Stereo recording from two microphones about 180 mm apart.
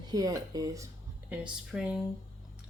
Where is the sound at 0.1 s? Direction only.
20° right (ahead or behind).